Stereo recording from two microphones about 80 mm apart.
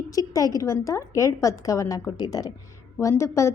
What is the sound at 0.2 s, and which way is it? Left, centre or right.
A woman's voice, left.